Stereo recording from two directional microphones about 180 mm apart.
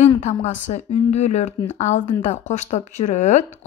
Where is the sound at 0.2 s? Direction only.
40° left (ahead or behind).